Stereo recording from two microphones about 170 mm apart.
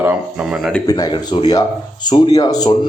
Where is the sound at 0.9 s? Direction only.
25° left (ahead or behind).